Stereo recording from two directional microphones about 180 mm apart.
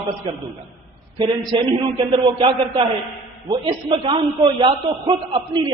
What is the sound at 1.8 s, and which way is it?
A man's voice, 25° right (ahead or behind).